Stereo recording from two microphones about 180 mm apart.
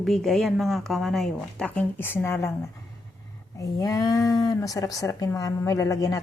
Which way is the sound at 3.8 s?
20° left (ahead or behind).